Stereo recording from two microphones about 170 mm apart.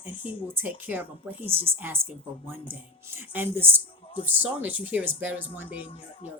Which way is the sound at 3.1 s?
10° right (ahead or behind).